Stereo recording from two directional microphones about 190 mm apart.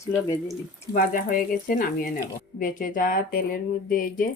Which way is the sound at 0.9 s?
45° left (ahead or behind).